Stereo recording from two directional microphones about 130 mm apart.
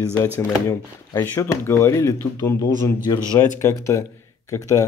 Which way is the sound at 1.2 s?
15° left (ahead or behind).